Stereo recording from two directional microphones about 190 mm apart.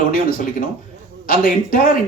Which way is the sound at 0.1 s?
50° left (ahead or behind).